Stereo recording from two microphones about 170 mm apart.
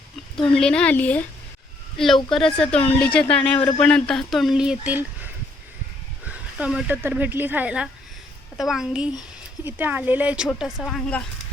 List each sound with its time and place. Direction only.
0.5 s speech: 5° left (ahead or behind)
2.3 s speech: 5° left (ahead or behind)